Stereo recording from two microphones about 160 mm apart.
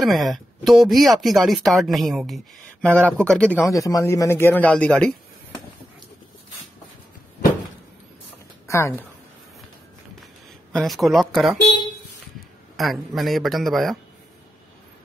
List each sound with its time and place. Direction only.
0.0 s speech: centre (ahead or behind)
3.6 s speech: 20° left (ahead or behind)
8.6 s speech: 15° left (ahead or behind)
10.7 s speech: centre (ahead or behind)
12.7 s speech: centre (ahead or behind)